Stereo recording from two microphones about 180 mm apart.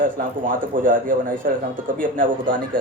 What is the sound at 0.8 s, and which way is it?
Speech, 50° right (ahead or behind).